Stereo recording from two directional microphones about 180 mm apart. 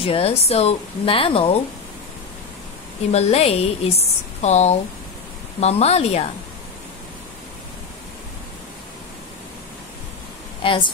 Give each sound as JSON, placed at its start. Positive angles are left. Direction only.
{"t": 0.0, "sound": "a woman's voice", "side_deg": 30}
{"t": 3.1, "sound": "a woman's voice", "side_deg": 35}
{"t": 10.6, "sound": "speech", "side_deg": 30}